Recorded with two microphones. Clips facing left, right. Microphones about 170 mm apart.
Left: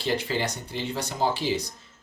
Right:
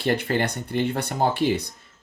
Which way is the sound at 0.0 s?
55° right (ahead or behind).